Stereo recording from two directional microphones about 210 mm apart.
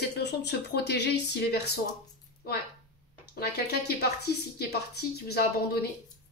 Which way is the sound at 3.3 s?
50° left (ahead or behind).